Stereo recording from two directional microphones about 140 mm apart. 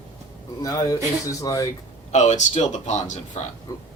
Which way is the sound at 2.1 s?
55° left (ahead or behind).